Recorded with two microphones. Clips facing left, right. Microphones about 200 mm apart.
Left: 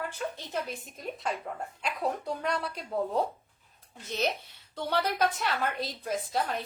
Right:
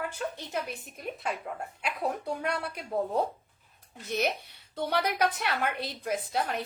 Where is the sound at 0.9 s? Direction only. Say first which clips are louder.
Even; 10° right (ahead or behind).